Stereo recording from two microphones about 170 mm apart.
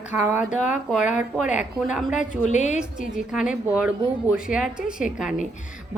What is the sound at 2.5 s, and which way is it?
Speech, 45° left (ahead or behind).